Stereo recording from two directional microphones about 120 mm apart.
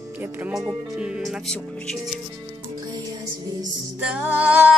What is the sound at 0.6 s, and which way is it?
Speech, 5° right (ahead or behind).